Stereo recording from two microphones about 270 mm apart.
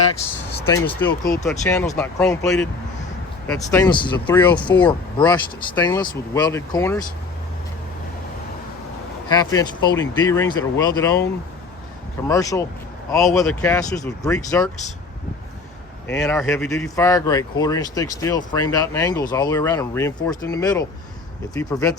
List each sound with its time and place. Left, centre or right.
0.6 s speech: centre
9.3 s speech: centre
12.3 s speech: centre
13.2 s speech: centre
16.0 s speech: centre